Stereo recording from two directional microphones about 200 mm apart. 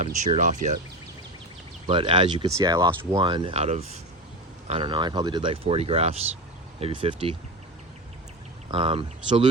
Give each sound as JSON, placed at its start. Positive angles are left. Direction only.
{"t": 0.3, "sound": "speech", "side_deg": -35}
{"t": 1.9, "sound": "speech", "side_deg": -25}
{"t": 8.7, "sound": "speech", "side_deg": -25}